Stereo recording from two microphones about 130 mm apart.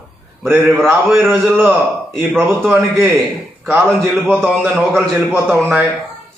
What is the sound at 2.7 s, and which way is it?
Speech, 10° right (ahead or behind).